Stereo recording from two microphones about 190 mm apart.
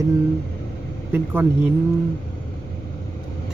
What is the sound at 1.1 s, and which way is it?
Speech, 10° right (ahead or behind).